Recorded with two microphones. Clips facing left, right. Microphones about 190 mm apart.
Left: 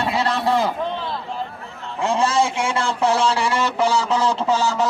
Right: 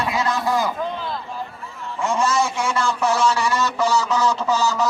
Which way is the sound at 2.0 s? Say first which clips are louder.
Left 2 dB; 30° left (ahead or behind).